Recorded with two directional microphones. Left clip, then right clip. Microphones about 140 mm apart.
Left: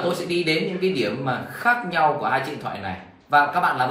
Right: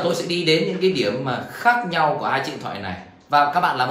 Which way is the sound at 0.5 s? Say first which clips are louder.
Right 7 dB; 10° right (ahead or behind).